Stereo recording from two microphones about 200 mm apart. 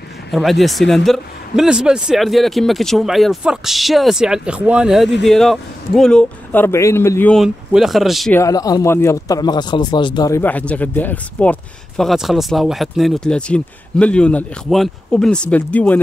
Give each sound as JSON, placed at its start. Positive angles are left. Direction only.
{"t": 0.3, "sound": "a man's voice", "side_deg": 0}
{"t": 8.4, "sound": "a man's voice", "side_deg": 15}